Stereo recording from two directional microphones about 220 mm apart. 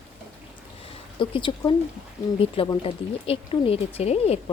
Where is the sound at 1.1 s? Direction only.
20° left (ahead or behind).